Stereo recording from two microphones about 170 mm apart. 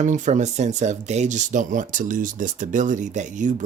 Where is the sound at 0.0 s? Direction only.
45° right (ahead or behind).